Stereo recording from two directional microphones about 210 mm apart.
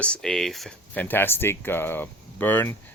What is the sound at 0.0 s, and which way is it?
Speech, 5° left (ahead or behind).